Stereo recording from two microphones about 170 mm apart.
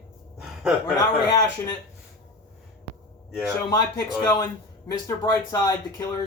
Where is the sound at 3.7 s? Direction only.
20° left (ahead or behind).